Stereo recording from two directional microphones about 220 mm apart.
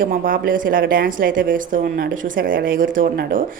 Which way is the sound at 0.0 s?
40° right (ahead or behind).